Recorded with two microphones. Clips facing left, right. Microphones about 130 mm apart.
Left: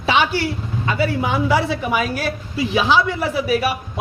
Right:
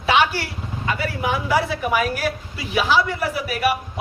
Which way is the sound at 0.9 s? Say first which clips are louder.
Left 3 dB; 25° left (ahead or behind).